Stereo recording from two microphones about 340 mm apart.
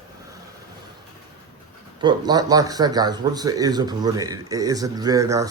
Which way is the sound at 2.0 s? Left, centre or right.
Centre.